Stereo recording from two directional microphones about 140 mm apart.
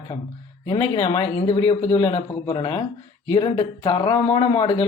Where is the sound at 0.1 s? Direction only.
35° left (ahead or behind).